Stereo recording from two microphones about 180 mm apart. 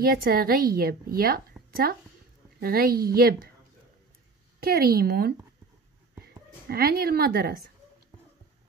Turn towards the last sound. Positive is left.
turn(degrees=-60)  # may be behind; listen again after turning